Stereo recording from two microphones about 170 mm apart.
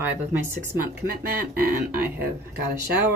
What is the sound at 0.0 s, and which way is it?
Speech, 10° right (ahead or behind).